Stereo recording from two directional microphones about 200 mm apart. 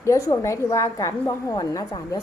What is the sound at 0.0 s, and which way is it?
A woman's voice, 15° left (ahead or behind).